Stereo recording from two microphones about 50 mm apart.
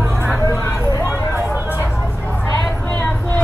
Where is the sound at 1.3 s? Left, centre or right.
Right.